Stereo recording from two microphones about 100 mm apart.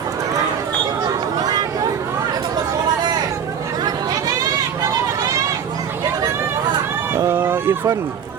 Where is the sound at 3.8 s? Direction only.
40° right (ahead or behind).